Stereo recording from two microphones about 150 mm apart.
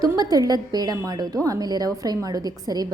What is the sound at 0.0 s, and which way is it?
A woman's voice, 25° right (ahead or behind).